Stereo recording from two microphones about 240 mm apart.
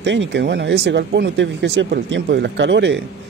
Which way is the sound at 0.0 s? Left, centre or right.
Right.